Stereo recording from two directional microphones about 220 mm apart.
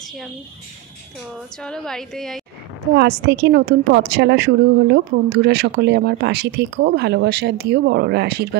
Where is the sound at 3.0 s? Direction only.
50° right (ahead or behind).